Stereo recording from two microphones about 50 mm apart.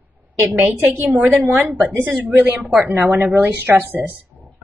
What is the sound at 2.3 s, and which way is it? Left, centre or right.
A woman's voice, right.